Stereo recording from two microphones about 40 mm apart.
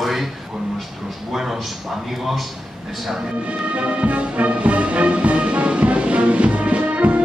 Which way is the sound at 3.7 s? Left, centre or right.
Right.